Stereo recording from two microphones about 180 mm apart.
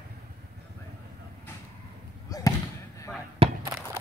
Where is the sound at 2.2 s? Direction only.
20° left (ahead or behind).